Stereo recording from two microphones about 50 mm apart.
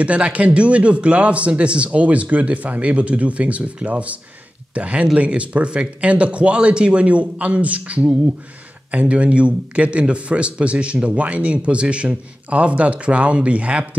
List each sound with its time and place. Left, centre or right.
0.0 s speech: right